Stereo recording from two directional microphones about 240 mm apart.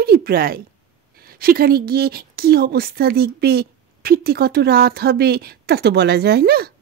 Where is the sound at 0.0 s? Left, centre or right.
Right.